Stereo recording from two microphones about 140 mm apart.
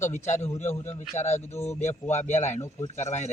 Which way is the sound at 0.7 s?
15° left (ahead or behind).